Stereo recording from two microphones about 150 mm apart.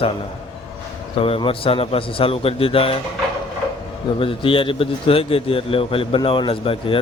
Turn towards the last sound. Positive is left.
turn(degrees=35)  # may be behind; listen again after turning